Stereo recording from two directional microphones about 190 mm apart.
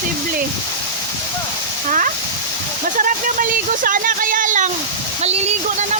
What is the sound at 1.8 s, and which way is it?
Speech, 45° right (ahead or behind).